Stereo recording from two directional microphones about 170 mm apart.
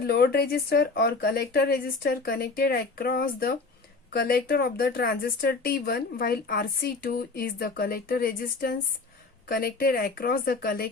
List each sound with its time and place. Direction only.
0.0 s speech: 65° left (ahead or behind)